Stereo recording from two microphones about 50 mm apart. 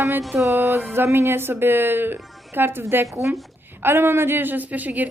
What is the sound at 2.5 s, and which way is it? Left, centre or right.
A woman's voice, right.